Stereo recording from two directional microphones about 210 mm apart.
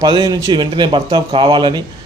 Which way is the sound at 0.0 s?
20° right (ahead or behind).